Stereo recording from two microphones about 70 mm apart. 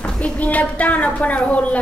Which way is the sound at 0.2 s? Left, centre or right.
Left.